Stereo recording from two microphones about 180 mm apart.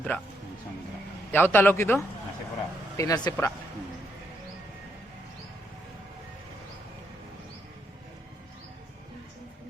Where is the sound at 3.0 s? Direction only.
20° left (ahead or behind).